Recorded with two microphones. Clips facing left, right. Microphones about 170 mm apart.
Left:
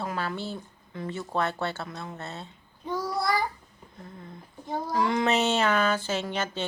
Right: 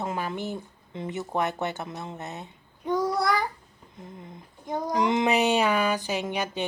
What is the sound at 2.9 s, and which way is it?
Child singing, 20° right (ahead or behind).